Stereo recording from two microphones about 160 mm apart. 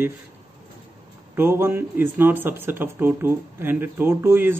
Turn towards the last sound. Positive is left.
turn(degrees=-15)  # may be behind; listen again after turning